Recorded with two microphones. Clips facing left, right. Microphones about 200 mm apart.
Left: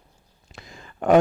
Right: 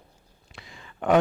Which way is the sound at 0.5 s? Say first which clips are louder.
Left 3 dB; 45° left (ahead or behind).